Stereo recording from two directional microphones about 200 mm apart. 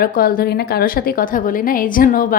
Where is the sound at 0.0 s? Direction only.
45° left (ahead or behind).